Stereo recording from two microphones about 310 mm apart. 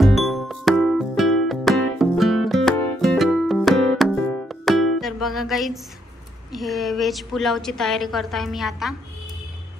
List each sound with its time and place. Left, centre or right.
0.0 s music: centre
6.5 s a woman's voice: centre